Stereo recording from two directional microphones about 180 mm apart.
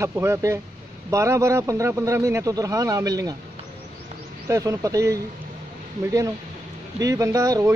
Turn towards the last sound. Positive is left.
turn(degrees=-15)  # may be behind; listen again after turning